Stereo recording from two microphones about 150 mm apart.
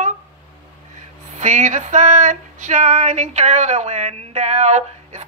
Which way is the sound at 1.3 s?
55° right (ahead or behind).